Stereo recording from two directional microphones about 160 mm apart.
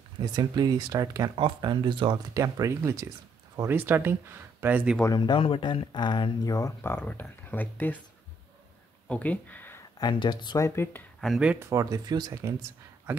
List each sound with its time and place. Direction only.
0.2 s speech: 25° right (ahead or behind)
2.3 s speech: 20° right (ahead or behind)
5.0 s speech: 25° left (ahead or behind)
9.1 s speech: 10° left (ahead or behind)
9.9 s speech: 30° left (ahead or behind)
11.1 s speech: centre (ahead or behind)
11.6 s speech: 20° right (ahead or behind)